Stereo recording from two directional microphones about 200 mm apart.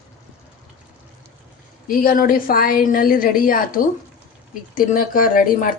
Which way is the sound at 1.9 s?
45° left (ahead or behind).